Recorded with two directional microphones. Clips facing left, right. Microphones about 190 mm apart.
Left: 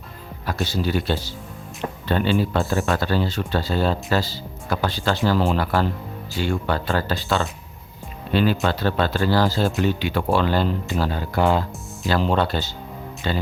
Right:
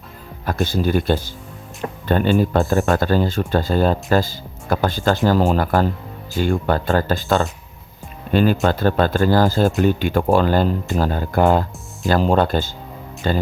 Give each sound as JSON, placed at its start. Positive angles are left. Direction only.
{"t": 0.4, "sound": "speech", "side_deg": -50}